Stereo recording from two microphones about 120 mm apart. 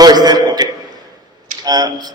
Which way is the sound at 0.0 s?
35° right (ahead or behind).